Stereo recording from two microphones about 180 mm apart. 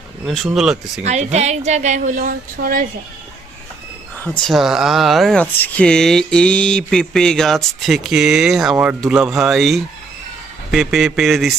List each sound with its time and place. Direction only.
0.3 s speech: centre (ahead or behind)
1.0 s a woman's voice: 40° right (ahead or behind)
4.2 s speech: centre (ahead or behind)